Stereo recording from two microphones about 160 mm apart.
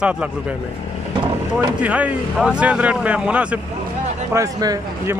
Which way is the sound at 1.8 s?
10° right (ahead or behind).